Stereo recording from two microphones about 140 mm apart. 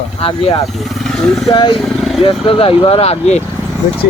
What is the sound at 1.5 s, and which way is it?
Speech, 35° left (ahead or behind).